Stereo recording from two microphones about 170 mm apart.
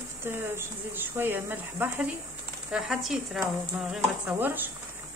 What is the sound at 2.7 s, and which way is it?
Speech, centre (ahead or behind).